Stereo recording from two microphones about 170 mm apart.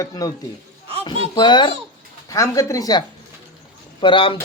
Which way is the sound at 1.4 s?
25° left (ahead or behind).